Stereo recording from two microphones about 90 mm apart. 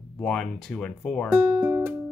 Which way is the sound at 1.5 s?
30° right (ahead or behind).